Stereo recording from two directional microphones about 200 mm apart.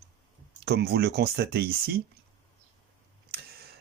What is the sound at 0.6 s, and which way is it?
Speech, 55° right (ahead or behind).